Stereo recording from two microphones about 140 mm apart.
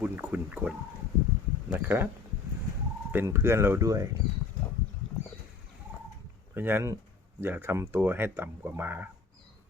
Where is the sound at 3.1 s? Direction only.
15° right (ahead or behind).